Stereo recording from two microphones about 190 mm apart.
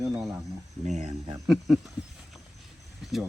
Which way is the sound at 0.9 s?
40° right (ahead or behind).